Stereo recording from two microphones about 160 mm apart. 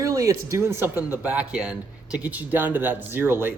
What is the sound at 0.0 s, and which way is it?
A man's voice, 20° right (ahead or behind).